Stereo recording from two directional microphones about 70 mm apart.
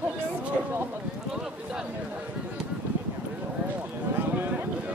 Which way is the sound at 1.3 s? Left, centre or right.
Centre.